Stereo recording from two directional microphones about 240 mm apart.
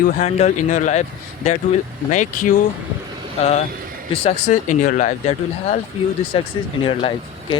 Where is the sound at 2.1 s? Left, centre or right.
Left.